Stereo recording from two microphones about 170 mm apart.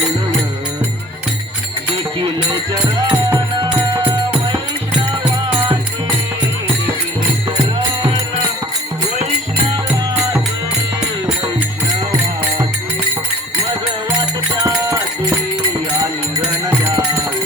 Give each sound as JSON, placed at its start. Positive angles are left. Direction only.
{"t": 3.1, "sound": "music", "side_deg": -15}
{"t": 3.7, "sound": "music", "side_deg": -25}
{"t": 7.5, "sound": "music", "side_deg": -25}
{"t": 16.0, "sound": "music", "side_deg": -20}